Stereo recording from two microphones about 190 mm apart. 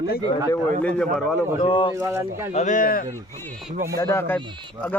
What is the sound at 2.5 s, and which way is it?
Speech, 40° left (ahead or behind).